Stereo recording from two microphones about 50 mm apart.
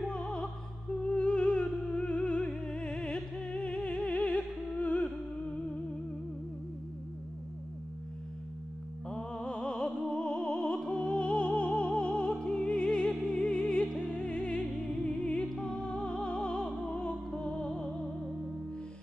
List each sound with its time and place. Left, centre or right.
0.0 s music: left
9.1 s music: centre